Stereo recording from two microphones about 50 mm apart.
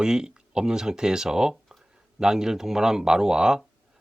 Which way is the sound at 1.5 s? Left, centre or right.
Centre.